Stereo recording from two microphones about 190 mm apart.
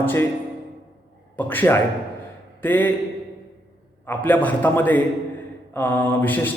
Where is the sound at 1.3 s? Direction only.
10° left (ahead or behind).